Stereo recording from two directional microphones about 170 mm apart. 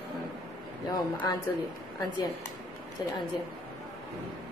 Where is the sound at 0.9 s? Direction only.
25° left (ahead or behind).